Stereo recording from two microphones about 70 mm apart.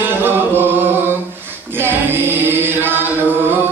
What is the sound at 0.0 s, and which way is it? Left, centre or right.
Chant, right.